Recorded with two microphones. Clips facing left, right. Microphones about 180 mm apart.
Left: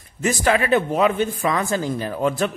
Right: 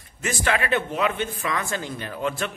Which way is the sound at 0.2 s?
40° left (ahead or behind).